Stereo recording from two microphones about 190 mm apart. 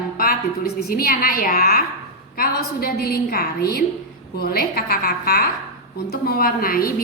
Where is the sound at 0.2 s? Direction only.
50° left (ahead or behind).